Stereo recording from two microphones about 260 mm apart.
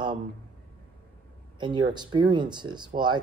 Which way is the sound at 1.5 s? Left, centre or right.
Centre.